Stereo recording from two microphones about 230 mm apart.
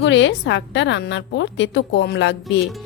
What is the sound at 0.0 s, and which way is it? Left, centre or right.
Speech, left.